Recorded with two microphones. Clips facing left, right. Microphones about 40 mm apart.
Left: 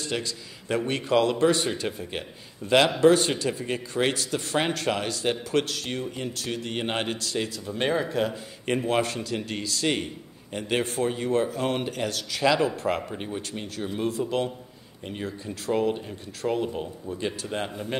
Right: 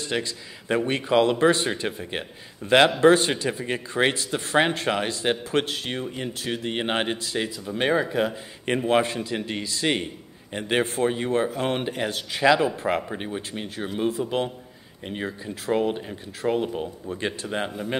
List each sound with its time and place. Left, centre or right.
0.0 s speech: right
8.7 s speech: right
17.1 s speech: right
17.5 s speech: centre